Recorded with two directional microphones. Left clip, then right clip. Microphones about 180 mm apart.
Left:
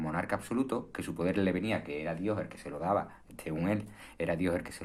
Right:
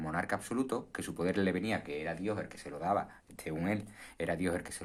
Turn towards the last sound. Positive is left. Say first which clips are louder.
# left 3 dB
turn(degrees=-30)  # may be behind; listen again after turning